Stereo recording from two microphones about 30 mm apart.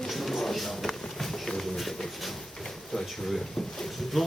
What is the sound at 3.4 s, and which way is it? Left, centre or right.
Speech, centre.